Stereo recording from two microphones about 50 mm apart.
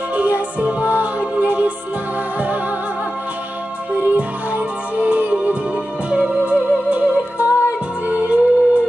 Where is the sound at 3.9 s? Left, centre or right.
Right.